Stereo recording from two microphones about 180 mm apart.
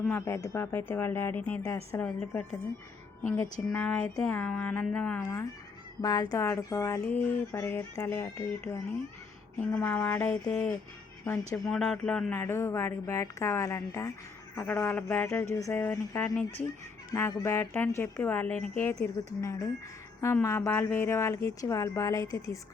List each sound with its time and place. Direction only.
0.0 s speech: 15° left (ahead or behind)
6.0 s speech: 20° left (ahead or behind)
11.6 s speech: centre (ahead or behind); by 22.5 s 20° left (ahead or behind)